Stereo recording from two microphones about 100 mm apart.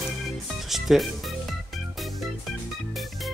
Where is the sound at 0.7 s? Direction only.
Centre (ahead or behind).